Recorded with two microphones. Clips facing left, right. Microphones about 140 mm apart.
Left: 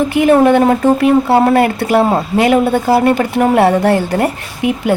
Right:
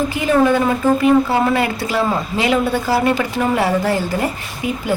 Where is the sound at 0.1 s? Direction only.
65° left (ahead or behind).